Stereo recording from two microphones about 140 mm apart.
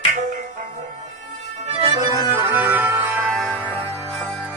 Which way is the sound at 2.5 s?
15° right (ahead or behind).